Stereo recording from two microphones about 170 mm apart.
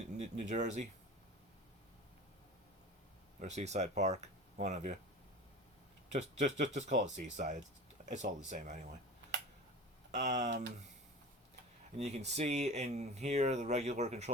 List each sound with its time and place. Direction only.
0.1 s speech: 45° right (ahead or behind)
3.4 s speech: 40° right (ahead or behind)
6.1 s speech: 45° right (ahead or behind)
10.2 s speech: 45° right (ahead or behind)
11.9 s speech: 40° right (ahead or behind)